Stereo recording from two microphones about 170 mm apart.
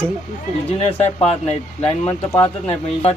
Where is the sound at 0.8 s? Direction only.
40° left (ahead or behind).